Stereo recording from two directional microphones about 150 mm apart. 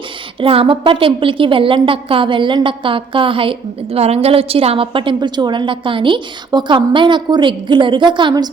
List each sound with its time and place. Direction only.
0.3 s a woman's voice: 40° right (ahead or behind)